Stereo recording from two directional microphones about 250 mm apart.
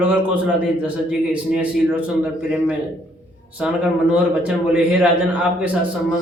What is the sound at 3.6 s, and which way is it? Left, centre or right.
A man's voice, centre.